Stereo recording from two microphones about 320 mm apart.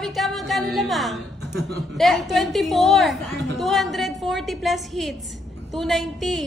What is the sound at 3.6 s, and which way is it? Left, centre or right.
A woman's voice, centre.